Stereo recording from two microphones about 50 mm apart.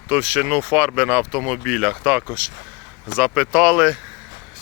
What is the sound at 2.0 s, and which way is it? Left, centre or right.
Speech, right.